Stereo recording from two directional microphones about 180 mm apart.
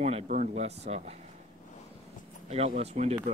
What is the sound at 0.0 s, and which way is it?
Speech, 40° right (ahead or behind).